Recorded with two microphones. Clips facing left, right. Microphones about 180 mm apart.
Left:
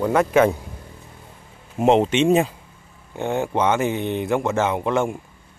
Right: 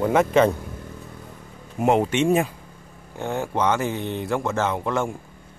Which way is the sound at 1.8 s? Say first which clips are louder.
Left 3 dB; 25° left (ahead or behind).